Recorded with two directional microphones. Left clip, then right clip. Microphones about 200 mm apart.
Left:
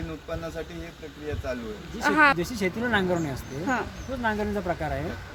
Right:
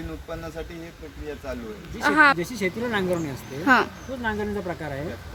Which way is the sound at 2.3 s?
Centre (ahead or behind).